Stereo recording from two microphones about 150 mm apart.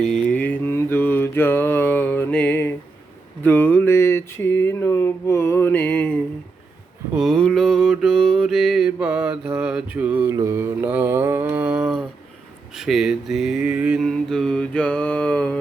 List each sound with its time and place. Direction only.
0.0 s mantra: 5° left (ahead or behind)
7.1 s mantra: 5° right (ahead or behind)
14.1 s mantra: 5° left (ahead or behind)